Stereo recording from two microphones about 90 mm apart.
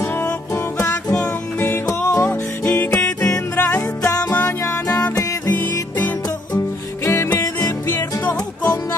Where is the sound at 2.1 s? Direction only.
35° left (ahead or behind).